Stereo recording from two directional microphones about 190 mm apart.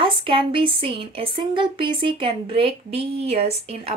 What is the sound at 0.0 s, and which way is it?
Speech, 25° right (ahead or behind).